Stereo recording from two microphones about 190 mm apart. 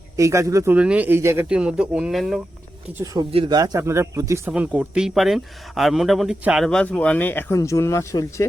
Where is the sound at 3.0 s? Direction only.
15° right (ahead or behind); by 8.4 s 15° left (ahead or behind).